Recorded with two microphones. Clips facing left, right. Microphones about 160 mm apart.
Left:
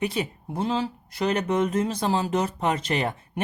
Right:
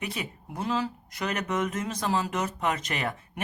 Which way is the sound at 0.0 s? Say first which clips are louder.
Left 8 dB; 30° left (ahead or behind).